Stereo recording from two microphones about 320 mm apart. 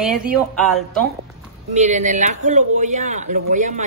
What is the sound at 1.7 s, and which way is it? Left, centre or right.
Speech, right.